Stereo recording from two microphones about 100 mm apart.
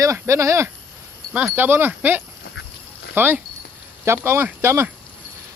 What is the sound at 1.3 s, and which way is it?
Speech, 10° right (ahead or behind).